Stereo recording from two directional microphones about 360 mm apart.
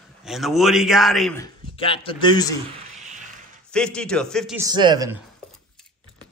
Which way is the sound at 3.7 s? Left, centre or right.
Centre.